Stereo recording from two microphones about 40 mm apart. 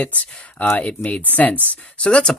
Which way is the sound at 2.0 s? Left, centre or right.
Left.